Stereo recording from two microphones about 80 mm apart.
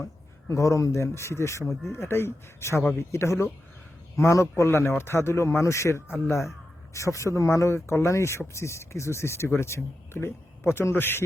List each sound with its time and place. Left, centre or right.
0.0 s speech: left
1.6 s speech: centre
2.0 s speech: left